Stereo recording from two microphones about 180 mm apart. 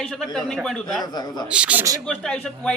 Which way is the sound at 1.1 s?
20° left (ahead or behind).